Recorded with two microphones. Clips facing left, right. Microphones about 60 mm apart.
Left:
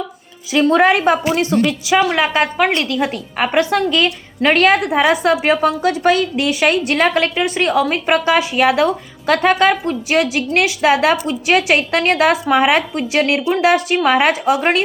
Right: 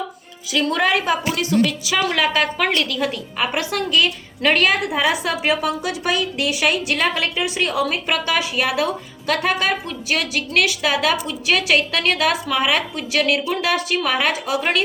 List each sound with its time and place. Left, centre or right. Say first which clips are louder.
0.5 s a woman's voice: left 6 dB; left
2.0 s speech: left 4 dB; centre
2.2 s a woman's voice: left 4 dB; left